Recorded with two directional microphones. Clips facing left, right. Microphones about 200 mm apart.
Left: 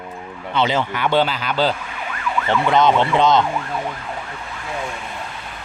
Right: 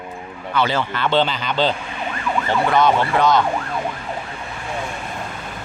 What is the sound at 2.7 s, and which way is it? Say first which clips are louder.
Speech: left 2 dB; 20° left (ahead or behind).